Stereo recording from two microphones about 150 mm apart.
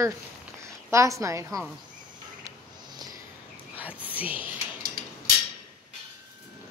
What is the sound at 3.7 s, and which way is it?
Whispering, 10° right (ahead or behind).